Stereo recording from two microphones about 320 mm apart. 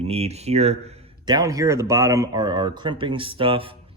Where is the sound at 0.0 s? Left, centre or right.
Centre.